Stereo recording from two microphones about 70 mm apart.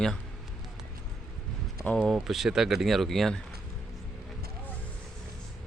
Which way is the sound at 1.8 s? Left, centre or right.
Centre.